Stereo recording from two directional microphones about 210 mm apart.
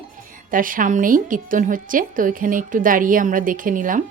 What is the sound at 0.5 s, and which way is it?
Speech, 40° right (ahead or behind).